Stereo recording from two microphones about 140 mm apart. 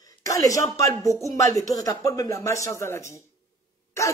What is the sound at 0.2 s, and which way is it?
Speech, 25° left (ahead or behind).